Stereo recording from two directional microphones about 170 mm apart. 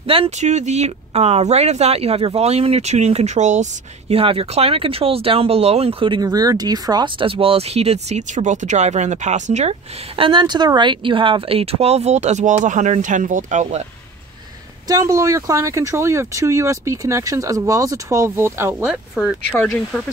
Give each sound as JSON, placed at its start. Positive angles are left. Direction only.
{"t": 0.0, "sound": "speech", "side_deg": -35}
{"t": 4.1, "sound": "speech", "side_deg": -35}
{"t": 14.9, "sound": "speech", "side_deg": -20}
{"t": 18.9, "sound": "speech", "side_deg": -5}